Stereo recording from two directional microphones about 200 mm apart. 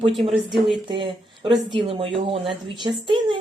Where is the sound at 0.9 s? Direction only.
25° right (ahead or behind).